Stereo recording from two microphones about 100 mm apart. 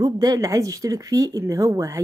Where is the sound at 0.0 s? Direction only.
40° right (ahead or behind).